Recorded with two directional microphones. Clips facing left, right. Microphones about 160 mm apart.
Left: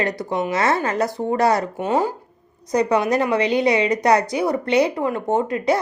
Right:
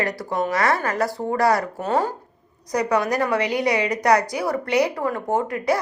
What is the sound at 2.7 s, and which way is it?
A woman's voice, 25° left (ahead or behind).